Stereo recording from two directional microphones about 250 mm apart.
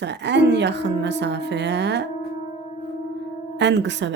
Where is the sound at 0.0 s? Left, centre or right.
Right.